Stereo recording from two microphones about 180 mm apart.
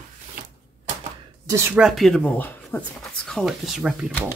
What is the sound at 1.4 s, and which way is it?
Speech, 15° right (ahead or behind).